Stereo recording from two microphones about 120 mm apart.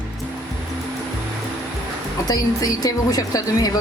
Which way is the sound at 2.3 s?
30° left (ahead or behind).